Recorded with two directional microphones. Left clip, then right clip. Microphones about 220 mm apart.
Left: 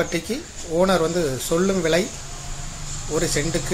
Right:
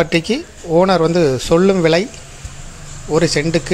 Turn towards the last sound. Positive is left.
turn(degrees=-40)  # may be behind; listen again after turning